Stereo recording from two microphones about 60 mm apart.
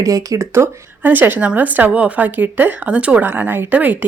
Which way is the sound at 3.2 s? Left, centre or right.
Right.